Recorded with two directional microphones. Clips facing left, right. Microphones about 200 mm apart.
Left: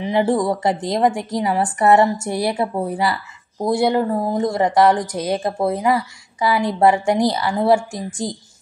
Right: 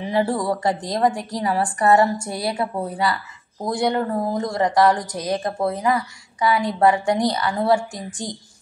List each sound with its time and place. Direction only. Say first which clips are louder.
0.0 s speech: left 4 dB; 20° left (ahead or behind)